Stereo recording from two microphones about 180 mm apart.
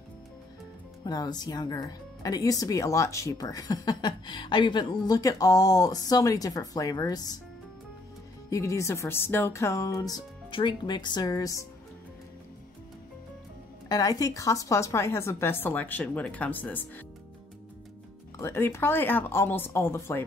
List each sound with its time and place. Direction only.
1.0 s speech: 20° left (ahead or behind)
8.5 s speech: 15° left (ahead or behind)
13.8 s speech: 20° left (ahead or behind)
18.4 s speech: 15° left (ahead or behind)